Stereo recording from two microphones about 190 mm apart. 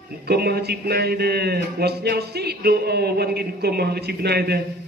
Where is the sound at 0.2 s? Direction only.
55° right (ahead or behind).